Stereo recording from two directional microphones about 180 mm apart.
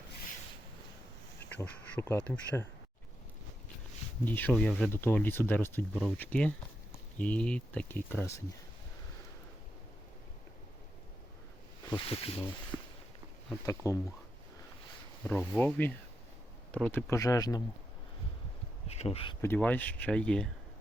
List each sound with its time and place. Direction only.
1.5 s speech: 10° left (ahead or behind)
4.3 s speech: 10° left (ahead or behind)
11.9 s speech: 30° left (ahead or behind)
12.7 s a sound: 15° right (ahead or behind)
13.5 s speech: 15° left (ahead or behind)
15.2 s speech: 5° left (ahead or behind)
18.9 s speech: 35° left (ahead or behind)
19.4 s speech: 10° left (ahead or behind)